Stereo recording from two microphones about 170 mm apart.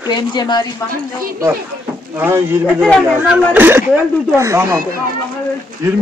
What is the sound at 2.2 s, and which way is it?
Speech, 10° right (ahead or behind).